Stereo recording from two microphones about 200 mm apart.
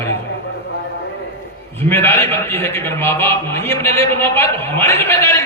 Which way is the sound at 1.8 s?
10° left (ahead or behind).